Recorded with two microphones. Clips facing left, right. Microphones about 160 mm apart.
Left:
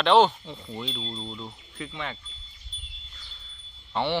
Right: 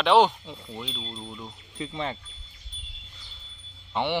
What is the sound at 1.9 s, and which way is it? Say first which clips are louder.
Speech: right 5 dB; 35° right (ahead or behind).